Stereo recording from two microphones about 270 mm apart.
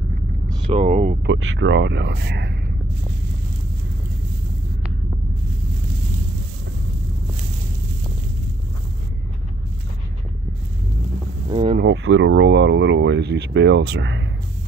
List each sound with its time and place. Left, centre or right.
0.7 s speech: right
1.2 s speech: right
11.5 s speech: centre
11.8 s speech: right